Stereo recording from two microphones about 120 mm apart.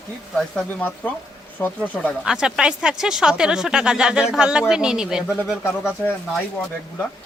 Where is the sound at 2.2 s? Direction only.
5° right (ahead or behind).